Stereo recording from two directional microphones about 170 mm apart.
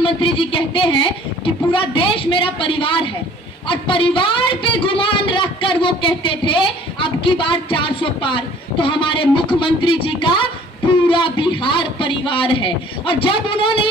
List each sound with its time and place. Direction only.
0.0 s a woman's voice: 30° left (ahead or behind)